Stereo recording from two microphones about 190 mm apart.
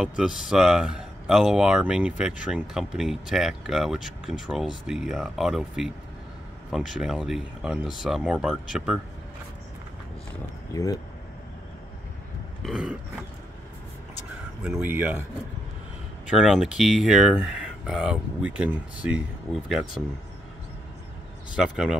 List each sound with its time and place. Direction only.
0.0 s speech: 5° right (ahead or behind)
10.7 s speech: 20° left (ahead or behind)
12.6 s speech: centre (ahead or behind)
14.6 s speech: 5° right (ahead or behind)
16.3 s speech: centre (ahead or behind)